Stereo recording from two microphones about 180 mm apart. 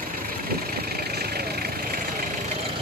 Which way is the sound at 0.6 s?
60° right (ahead or behind).